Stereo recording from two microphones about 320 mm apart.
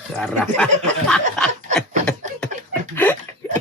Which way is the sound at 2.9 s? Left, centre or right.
Centre.